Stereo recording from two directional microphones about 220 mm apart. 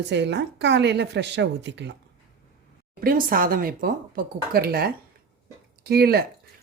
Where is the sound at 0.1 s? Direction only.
50° right (ahead or behind).